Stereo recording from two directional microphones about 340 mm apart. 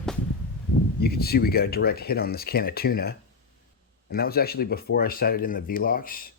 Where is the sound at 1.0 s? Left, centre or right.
Left.